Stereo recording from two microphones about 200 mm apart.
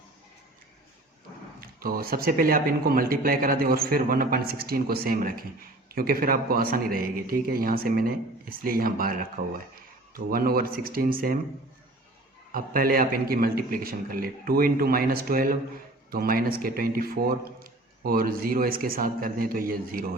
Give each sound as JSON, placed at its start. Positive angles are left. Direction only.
{"t": 1.6, "sound": "speech", "side_deg": -45}
{"t": 12.5, "sound": "speech", "side_deg": -45}